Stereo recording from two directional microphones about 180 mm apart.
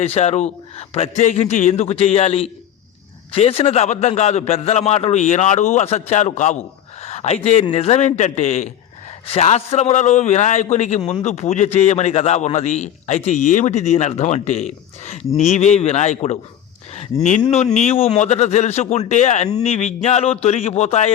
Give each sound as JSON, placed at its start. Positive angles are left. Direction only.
{"t": 0.0, "sound": "a man's voice", "side_deg": 35}
{"t": 17.7, "sound": "a man's voice", "side_deg": 35}